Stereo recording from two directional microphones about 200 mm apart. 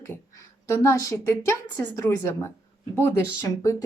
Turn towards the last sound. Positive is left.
turn(degrees=15)  # may be behind; listen again after turning